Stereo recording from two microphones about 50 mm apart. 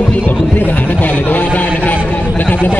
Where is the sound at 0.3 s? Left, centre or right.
Left.